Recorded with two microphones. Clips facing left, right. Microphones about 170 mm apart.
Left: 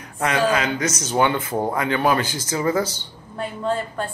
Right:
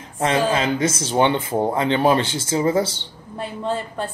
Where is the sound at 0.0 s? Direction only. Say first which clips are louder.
Right 3 dB; 30° right (ahead or behind).